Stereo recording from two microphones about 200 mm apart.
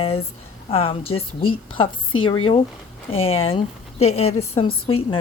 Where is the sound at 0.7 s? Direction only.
30° left (ahead or behind).